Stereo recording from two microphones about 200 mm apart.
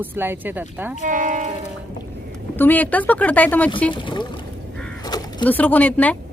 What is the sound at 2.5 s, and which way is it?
Speech, 10° left (ahead or behind).